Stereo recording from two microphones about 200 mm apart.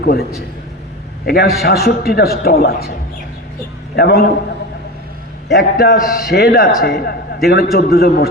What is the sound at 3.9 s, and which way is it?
Speech, 50° left (ahead or behind).